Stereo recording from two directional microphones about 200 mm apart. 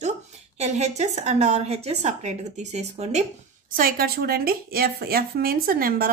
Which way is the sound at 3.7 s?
45° right (ahead or behind).